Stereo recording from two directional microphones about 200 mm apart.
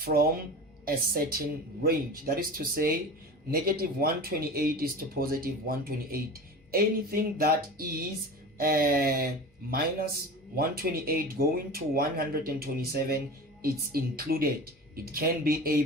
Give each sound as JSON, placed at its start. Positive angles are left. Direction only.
{"t": 0.0, "sound": "speech", "side_deg": -50}